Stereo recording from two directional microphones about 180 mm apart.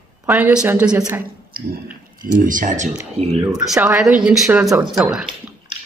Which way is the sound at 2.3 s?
45° right (ahead or behind).